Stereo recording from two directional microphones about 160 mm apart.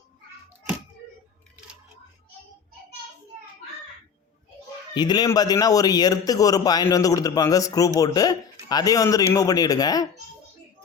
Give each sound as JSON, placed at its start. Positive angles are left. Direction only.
{"t": 4.9, "sound": "a man's voice", "side_deg": 25}